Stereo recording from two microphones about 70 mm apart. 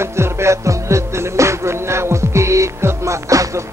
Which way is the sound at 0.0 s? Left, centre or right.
Right.